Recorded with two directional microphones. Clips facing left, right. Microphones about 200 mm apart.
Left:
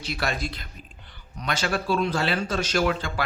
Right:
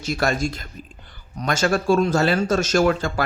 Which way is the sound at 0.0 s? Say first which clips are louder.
Right 7 dB; 45° right (ahead or behind).